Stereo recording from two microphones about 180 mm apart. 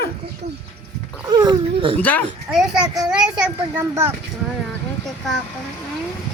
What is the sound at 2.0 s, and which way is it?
Speech, 10° left (ahead or behind).